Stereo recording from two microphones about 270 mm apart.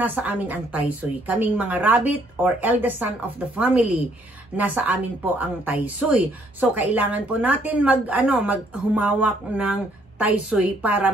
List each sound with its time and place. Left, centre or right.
0.0 s a woman's voice: centre